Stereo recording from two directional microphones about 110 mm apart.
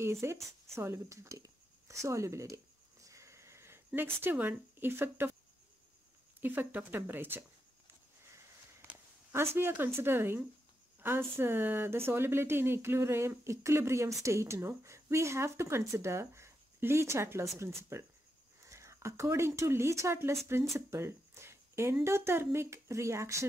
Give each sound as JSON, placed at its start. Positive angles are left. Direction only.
{"t": 0.0, "sound": "speech", "side_deg": -25}
{"t": 6.4, "sound": "speech", "side_deg": -15}
{"t": 8.8, "sound": "walk", "side_deg": -25}
{"t": 9.6, "sound": "speech", "side_deg": -20}
{"t": 20.7, "sound": "a sound", "side_deg": -25}
{"t": 22.0, "sound": "speech", "side_deg": -25}